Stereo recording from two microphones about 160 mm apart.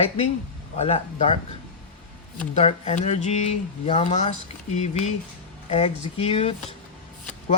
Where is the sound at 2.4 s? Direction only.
45° left (ahead or behind).